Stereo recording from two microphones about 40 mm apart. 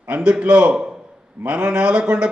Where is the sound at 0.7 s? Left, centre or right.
Centre.